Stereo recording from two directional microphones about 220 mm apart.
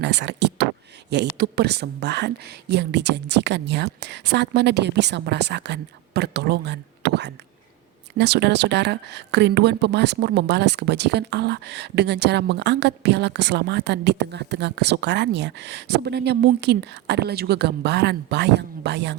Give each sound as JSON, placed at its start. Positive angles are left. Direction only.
{"t": 0.0, "sound": "speech", "side_deg": -50}